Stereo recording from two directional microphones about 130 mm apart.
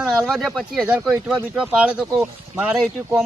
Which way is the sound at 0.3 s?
Centre (ahead or behind).